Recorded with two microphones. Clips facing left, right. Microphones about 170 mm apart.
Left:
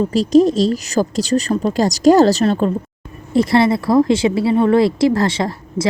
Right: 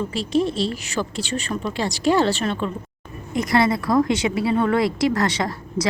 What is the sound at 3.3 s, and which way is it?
A woman's voice, 25° left (ahead or behind).